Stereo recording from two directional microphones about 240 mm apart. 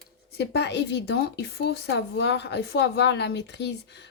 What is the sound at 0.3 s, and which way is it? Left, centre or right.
A woman's voice, left.